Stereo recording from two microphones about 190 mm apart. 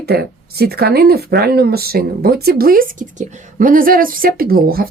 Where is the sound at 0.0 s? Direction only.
60° right (ahead or behind).